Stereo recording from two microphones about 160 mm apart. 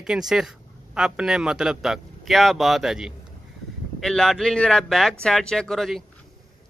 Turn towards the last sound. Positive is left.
turn(degrees=0)  # may be behind; listen again after turning